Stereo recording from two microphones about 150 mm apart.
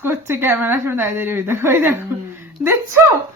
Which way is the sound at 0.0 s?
15° right (ahead or behind).